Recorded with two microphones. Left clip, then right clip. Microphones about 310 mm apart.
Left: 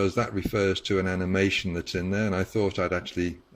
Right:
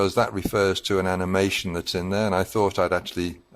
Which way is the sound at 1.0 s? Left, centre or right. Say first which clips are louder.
Right 4 dB; right.